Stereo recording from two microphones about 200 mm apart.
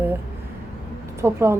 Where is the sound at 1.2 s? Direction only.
15° right (ahead or behind).